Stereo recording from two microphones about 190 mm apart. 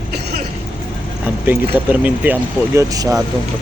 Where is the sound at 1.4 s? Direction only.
10° right (ahead or behind).